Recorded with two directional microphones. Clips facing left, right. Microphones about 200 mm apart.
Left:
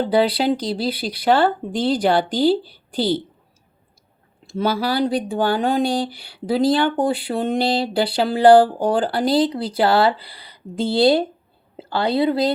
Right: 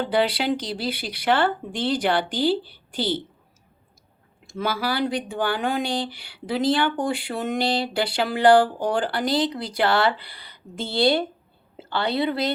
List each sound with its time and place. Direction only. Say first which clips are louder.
0.0 s speech: left 5 dB; 35° left (ahead or behind)
4.4 s speech: left 5 dB; 35° left (ahead or behind)